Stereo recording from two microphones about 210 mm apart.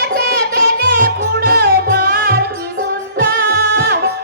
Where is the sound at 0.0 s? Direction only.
50° right (ahead or behind).